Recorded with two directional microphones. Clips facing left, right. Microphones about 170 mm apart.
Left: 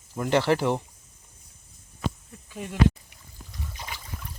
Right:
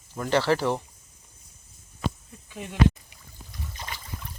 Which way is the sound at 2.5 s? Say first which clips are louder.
Left 2 dB; centre (ahead or behind).